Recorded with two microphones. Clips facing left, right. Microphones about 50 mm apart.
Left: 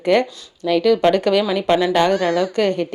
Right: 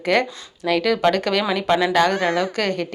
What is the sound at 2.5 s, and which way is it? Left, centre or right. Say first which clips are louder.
Speech: left 4 dB; centre.